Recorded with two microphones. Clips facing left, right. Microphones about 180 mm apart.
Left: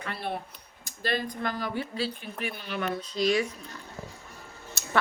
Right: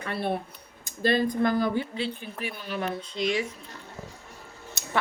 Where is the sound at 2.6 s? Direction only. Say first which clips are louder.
Right 1 dB; 40° right (ahead or behind); by 3.5 s 25° right (ahead or behind).